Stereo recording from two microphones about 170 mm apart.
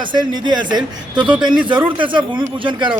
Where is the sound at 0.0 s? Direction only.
25° right (ahead or behind).